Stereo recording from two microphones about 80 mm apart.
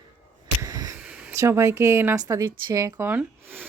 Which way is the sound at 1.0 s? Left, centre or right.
Centre.